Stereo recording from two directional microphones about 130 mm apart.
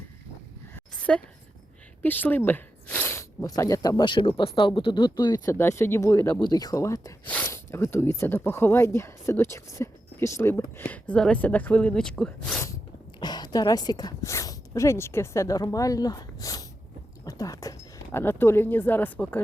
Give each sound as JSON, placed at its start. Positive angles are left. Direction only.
{"t": 0.9, "sound": "a sound", "side_deg": 10}
{"t": 2.0, "sound": "speech", "side_deg": 15}
{"t": 6.4, "sound": "a woman's voice", "side_deg": 30}
{"t": 12.5, "sound": "sneeze", "side_deg": 20}
{"t": 13.1, "sound": "speech", "side_deg": 35}